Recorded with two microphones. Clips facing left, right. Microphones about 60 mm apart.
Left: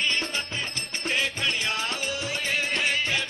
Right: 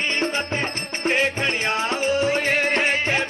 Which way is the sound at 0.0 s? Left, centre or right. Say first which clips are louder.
Right 5 dB; right.